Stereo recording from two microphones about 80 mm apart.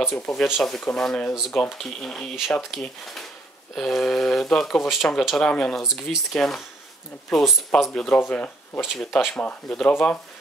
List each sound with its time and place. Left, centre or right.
0.1 s speech: centre
8.8 s speech: centre
9.4 s speech: centre